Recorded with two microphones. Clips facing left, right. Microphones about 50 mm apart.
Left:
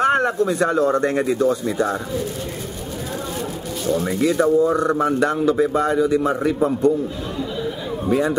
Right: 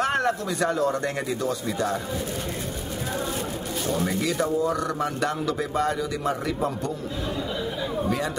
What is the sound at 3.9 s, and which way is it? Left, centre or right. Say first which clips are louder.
Speech: left 7 dB; left.